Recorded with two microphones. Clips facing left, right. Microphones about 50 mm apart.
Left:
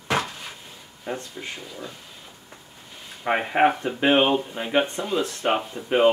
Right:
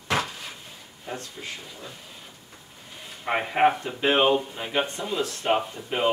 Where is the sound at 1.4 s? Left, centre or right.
Centre.